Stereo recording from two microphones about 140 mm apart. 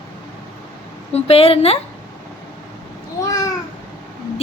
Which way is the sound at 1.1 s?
45° left (ahead or behind).